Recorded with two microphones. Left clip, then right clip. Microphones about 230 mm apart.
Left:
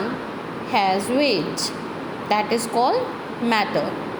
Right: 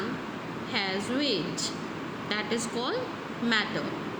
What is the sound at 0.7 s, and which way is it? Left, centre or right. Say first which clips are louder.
Speech: left 11 dB; left.